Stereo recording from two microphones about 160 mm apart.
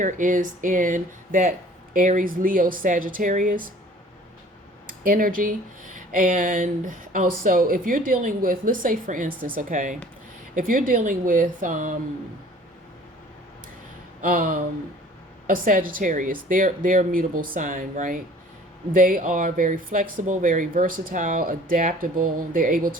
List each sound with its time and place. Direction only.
0.0 s speech: 55° right (ahead or behind)
4.9 s speech: 60° right (ahead or behind)
14.2 s a sound: 60° right (ahead or behind)
15.4 s speech: 60° right (ahead or behind)